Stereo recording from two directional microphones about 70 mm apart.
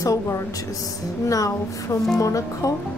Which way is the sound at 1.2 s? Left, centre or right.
Left.